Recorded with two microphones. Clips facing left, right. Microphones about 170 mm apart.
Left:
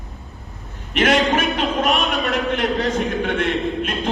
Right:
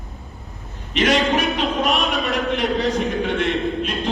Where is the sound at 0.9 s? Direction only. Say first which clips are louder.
Left 1 dB; 50° left (ahead or behind).